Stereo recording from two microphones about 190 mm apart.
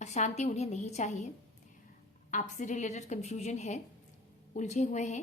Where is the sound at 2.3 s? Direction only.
40° left (ahead or behind).